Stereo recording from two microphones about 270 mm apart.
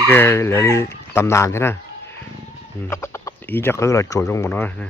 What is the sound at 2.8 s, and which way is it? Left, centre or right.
Speech, centre.